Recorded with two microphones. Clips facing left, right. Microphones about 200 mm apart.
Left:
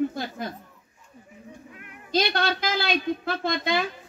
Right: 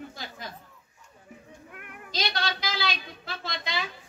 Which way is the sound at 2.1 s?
55° left (ahead or behind).